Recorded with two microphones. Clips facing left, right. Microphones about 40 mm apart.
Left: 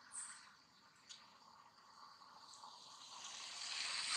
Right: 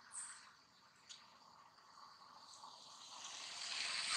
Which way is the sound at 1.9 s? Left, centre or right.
Centre.